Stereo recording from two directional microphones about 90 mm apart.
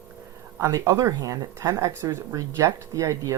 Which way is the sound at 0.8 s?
35° right (ahead or behind).